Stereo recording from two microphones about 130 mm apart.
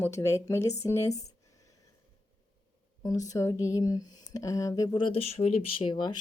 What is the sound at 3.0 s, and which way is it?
A woman's voice, 25° left (ahead or behind).